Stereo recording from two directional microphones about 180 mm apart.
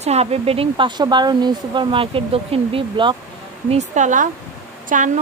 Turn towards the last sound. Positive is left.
turn(degrees=-45)  # may be behind; listen again after turning